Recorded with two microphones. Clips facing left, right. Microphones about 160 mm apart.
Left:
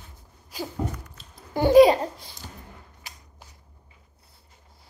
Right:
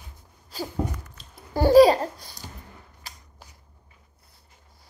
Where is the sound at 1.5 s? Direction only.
20° left (ahead or behind).